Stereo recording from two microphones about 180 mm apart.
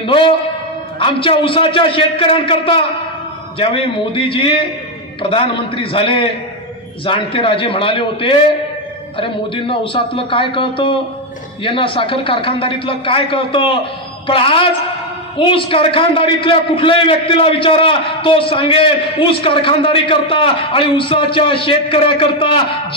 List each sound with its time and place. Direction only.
0.0 s a man's voice: 30° left (ahead or behind)